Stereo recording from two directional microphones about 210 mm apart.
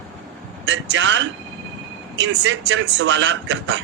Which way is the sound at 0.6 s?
60° right (ahead or behind).